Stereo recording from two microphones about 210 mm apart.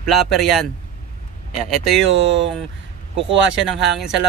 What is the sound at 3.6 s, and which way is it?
Speech, centre (ahead or behind).